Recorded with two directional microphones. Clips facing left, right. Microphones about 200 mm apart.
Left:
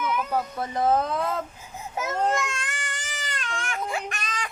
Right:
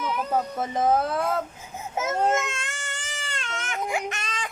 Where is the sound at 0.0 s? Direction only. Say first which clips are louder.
Left 1 dB; 35° right (ahead or behind).